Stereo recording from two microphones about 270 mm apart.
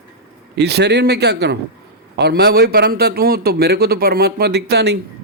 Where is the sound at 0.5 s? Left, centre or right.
Right.